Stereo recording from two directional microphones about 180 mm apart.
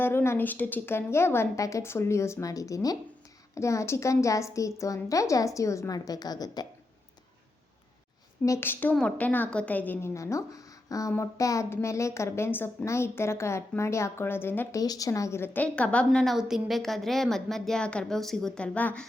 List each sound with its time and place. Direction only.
0.0 s a woman's voice: 10° left (ahead or behind)
8.4 s a woman's voice: 15° left (ahead or behind)